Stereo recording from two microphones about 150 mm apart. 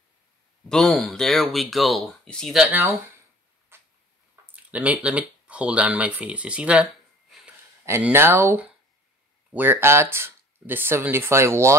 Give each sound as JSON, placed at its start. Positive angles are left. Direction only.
{"t": 0.7, "sound": "speech", "side_deg": 5}
{"t": 3.7, "sound": "tick-tock", "side_deg": -15}
{"t": 4.6, "sound": "speech", "side_deg": -10}
{"t": 7.8, "sound": "speech", "side_deg": -15}